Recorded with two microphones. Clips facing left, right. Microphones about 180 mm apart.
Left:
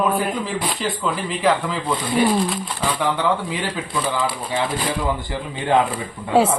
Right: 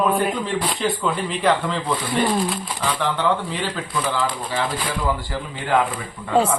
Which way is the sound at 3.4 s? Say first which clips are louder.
Left 1 dB; 10° left (ahead or behind).